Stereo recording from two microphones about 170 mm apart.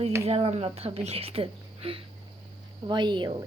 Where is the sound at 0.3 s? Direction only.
35° right (ahead or behind).